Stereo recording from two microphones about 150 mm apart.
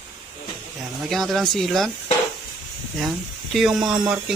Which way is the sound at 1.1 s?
Centre (ahead or behind).